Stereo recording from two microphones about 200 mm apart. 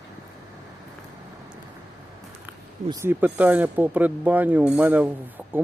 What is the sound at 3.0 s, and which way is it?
Speech, 10° right (ahead or behind).